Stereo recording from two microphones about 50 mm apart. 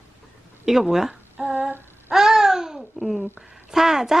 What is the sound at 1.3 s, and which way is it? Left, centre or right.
Female singing, centre.